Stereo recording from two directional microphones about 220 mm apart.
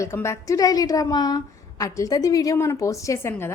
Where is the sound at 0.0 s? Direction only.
15° left (ahead or behind).